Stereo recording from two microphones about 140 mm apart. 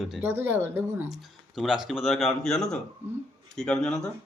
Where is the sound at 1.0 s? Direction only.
Centre (ahead or behind).